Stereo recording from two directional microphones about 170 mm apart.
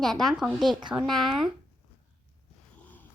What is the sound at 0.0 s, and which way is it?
Speech, centre (ahead or behind).